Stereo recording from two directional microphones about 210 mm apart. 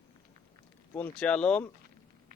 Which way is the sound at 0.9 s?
10° left (ahead or behind).